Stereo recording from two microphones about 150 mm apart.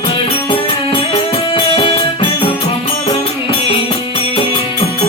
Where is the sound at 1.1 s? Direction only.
40° left (ahead or behind).